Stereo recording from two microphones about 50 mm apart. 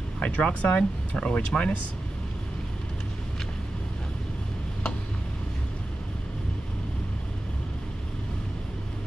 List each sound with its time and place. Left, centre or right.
0.2 s speech: left